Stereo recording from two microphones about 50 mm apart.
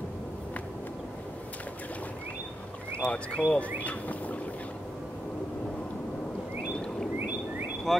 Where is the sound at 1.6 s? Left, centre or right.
Left.